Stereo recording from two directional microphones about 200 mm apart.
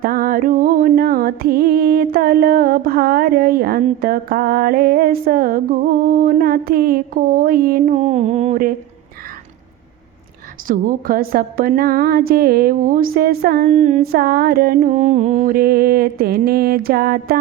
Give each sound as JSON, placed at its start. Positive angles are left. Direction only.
{"t": 0.0, "sound": "music", "side_deg": -45}
{"t": 6.1, "sound": "mantra", "side_deg": -45}
{"t": 10.7, "sound": "mantra", "side_deg": -45}
{"t": 13.7, "sound": "a sound", "side_deg": -35}
{"t": 14.0, "sound": "mantra", "side_deg": -50}